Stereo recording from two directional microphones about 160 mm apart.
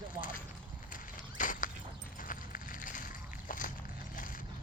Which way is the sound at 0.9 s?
55° left (ahead or behind).